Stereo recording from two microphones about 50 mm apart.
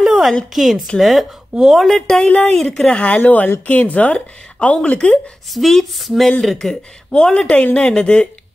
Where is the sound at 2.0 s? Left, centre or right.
Centre.